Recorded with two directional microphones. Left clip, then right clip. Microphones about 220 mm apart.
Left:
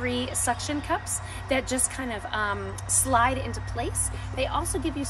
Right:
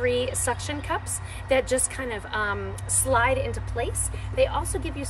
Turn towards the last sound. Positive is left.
turn(degrees=10)  # may be behind; listen again after turning